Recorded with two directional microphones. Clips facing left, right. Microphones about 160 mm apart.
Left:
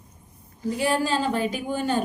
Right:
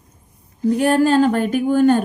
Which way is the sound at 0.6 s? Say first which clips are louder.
Right 9 dB; 60° right (ahead or behind).